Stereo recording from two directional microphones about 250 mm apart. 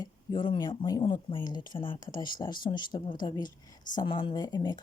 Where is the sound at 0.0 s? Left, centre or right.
Centre.